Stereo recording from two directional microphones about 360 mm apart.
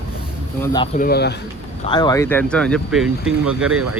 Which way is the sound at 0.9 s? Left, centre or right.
Left.